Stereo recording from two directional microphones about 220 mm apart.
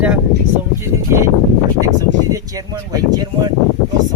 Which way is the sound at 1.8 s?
15° right (ahead or behind).